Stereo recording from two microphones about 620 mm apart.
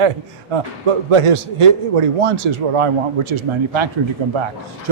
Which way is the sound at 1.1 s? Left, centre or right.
Right.